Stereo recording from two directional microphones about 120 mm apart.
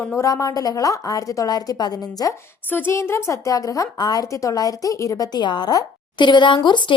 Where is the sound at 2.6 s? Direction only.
15° left (ahead or behind); by 6.9 s 40° left (ahead or behind).